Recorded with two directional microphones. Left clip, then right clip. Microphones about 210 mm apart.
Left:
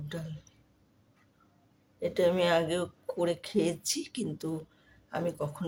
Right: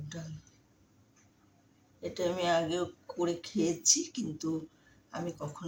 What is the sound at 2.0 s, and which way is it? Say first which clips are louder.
Speech: left 5 dB; 45° left (ahead or behind).